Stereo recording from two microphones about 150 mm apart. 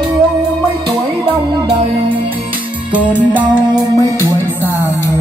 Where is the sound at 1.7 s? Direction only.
35° right (ahead or behind).